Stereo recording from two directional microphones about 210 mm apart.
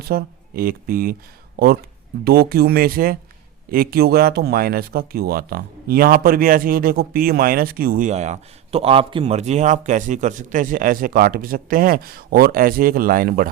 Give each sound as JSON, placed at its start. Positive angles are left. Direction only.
{"t": 0.0, "sound": "speech", "side_deg": -45}